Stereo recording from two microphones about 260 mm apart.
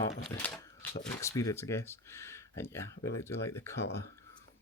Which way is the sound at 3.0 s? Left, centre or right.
Left.